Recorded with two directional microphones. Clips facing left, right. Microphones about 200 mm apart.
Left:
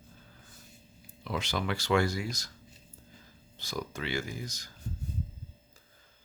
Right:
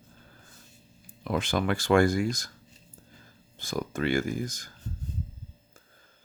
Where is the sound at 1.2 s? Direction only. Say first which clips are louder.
Right 6 dB; 50° right (ahead or behind).